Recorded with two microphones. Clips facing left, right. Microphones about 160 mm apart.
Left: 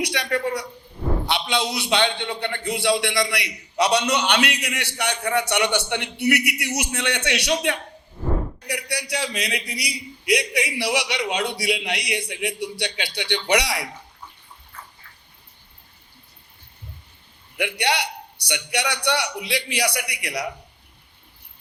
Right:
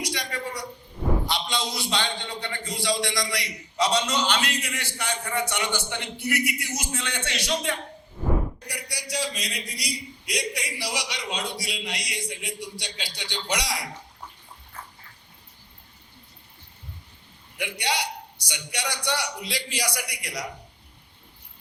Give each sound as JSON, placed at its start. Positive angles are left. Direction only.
{"t": 0.0, "sound": "a woman's voice", "side_deg": 65}
{"t": 17.6, "sound": "a man's voice", "side_deg": 65}